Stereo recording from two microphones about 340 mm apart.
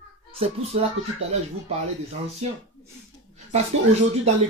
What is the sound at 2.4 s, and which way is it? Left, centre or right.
Speech, centre.